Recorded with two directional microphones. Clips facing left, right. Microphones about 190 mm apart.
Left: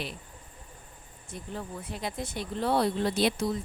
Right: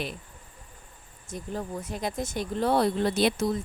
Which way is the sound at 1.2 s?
45° right (ahead or behind).